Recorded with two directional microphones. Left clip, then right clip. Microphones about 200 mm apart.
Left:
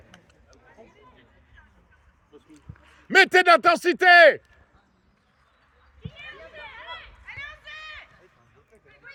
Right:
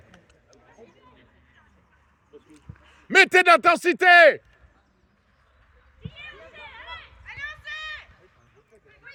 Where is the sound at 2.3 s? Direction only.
50° left (ahead or behind).